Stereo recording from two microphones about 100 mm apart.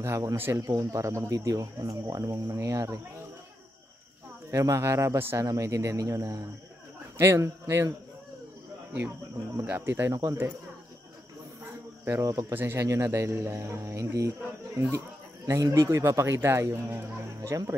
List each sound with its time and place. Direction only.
0.0 s speech: 30° right (ahead or behind)
4.5 s speech: 30° right (ahead or behind)
9.7 s speech: 20° right (ahead or behind)
12.0 s speech: 25° right (ahead or behind)